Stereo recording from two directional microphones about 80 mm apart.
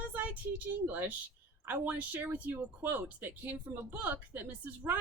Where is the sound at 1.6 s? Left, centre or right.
Right.